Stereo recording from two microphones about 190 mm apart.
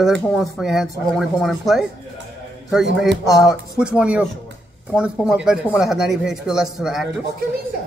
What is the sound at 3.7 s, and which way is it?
Speech, 5° right (ahead or behind).